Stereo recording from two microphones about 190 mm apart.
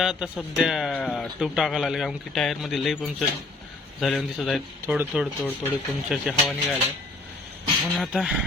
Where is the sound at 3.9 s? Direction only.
Centre (ahead or behind).